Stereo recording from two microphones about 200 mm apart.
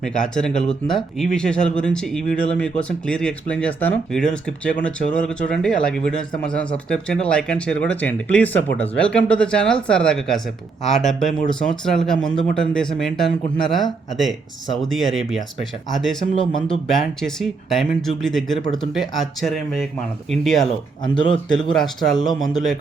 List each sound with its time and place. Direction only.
0.0 s speech: 5° left (ahead or behind)
20.7 s speech: 25° left (ahead or behind)
21.7 s speech: centre (ahead or behind)